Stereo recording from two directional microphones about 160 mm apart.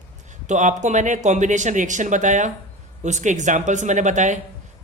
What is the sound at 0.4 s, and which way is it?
Speech, 50° right (ahead or behind).